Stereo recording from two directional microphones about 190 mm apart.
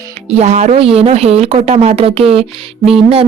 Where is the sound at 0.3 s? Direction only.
35° right (ahead or behind).